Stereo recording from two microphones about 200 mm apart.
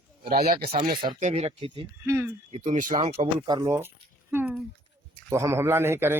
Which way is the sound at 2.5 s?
35° right (ahead or behind).